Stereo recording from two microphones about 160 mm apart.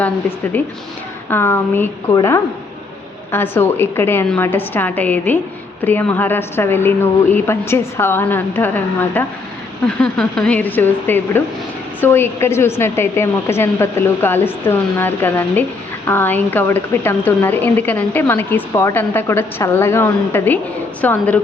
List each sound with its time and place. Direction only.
0.5 s a woman's voice: 10° left (ahead or behind)